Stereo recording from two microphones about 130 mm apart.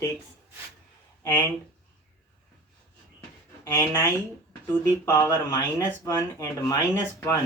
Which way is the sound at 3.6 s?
20° left (ahead or behind).